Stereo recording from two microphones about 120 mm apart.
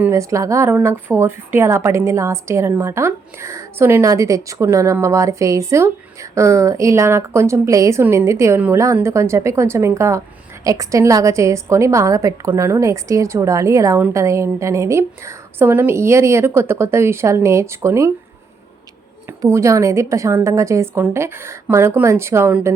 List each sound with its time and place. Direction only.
0.0 s speech: 25° right (ahead or behind)
19.5 s speech: 25° right (ahead or behind)